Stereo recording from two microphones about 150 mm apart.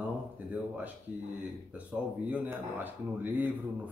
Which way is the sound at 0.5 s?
10° right (ahead or behind).